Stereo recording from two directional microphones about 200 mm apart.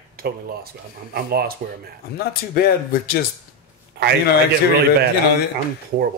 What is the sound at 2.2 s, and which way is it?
Speech, 50° left (ahead or behind).